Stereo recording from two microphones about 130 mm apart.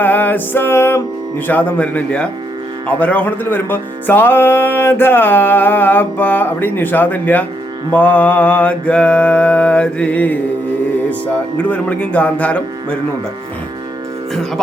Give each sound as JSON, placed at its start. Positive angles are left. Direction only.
{"t": 0.0, "sound": "speech", "side_deg": 15}